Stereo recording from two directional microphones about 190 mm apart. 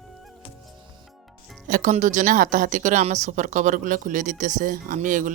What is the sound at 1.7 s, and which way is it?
Speech, 40° right (ahead or behind).